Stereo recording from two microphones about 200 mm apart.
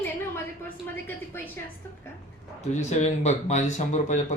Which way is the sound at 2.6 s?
35° left (ahead or behind).